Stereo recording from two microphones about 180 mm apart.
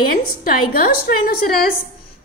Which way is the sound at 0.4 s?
55° left (ahead or behind).